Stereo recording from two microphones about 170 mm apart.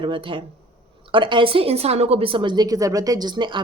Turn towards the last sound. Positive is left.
turn(degrees=-25)  # may be behind; listen again after turning